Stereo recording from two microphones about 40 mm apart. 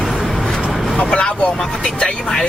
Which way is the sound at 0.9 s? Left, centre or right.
Left.